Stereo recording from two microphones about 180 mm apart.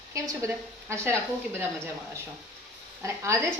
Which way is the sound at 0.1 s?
15° right (ahead or behind).